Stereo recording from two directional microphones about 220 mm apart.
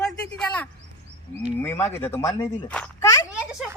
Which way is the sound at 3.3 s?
5° right (ahead or behind).